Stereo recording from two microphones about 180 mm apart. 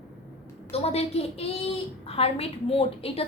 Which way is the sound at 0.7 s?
35° left (ahead or behind).